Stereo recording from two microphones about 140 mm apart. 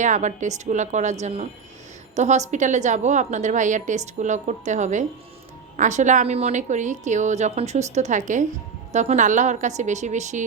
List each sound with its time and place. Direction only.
0.0 s a woman's voice: 60° right (ahead or behind)
2.1 s a woman's voice: 55° right (ahead or behind)